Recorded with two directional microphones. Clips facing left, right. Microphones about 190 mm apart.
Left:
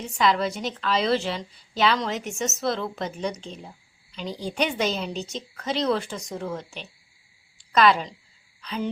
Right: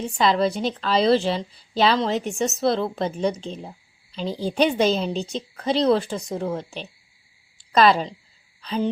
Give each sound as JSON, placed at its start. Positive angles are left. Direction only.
{"t": 0.2, "sound": "a woman's voice", "side_deg": -30}